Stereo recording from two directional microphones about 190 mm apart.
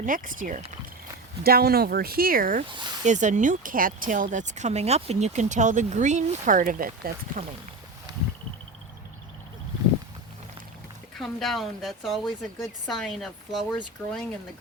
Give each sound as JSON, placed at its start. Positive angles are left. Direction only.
{"t": 0.0, "sound": "speech", "side_deg": -45}
{"t": 11.2, "sound": "speech", "side_deg": 0}